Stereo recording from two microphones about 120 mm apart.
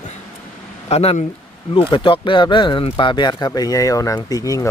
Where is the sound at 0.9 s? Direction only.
60° left (ahead or behind).